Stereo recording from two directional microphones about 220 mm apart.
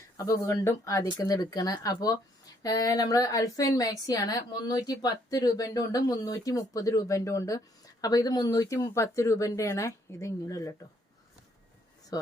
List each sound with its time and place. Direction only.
0.2 s a woman's voice: 15° left (ahead or behind)
12.1 s speech: 15° left (ahead or behind)